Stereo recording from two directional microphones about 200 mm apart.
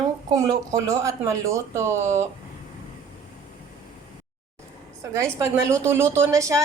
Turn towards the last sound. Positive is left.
turn(degrees=-15)  # may be behind; listen again after turning